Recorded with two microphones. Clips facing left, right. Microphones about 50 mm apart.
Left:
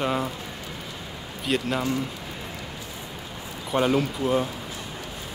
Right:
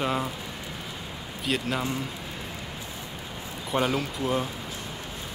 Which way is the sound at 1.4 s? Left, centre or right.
Centre.